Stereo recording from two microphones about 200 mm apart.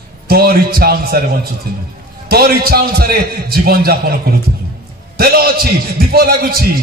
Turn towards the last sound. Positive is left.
turn(degrees=-50)  # may be behind; listen again after turning